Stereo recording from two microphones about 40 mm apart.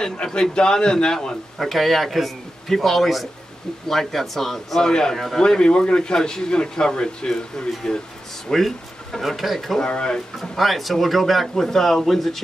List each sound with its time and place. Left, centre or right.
0.0 s a man's voice: centre
1.6 s speech: centre
5.4 s a man's voice: left
8.5 s speech: centre
9.8 s a man's voice: left
10.4 s speech: centre